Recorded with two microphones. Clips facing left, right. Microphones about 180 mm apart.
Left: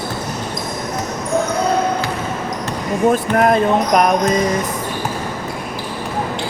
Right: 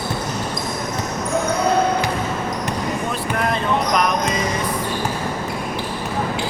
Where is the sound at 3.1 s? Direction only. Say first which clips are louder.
Left 12 dB; 50° left (ahead or behind).